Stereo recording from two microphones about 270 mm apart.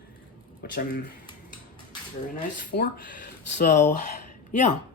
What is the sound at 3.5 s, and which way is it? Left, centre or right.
Speech, left.